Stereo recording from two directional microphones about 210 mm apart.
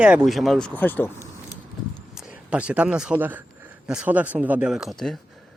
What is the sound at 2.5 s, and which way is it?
Speech, 5° right (ahead or behind).